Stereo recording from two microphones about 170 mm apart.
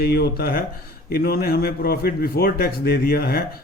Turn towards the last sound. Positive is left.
turn(degrees=65)  # may be behind; listen again after turning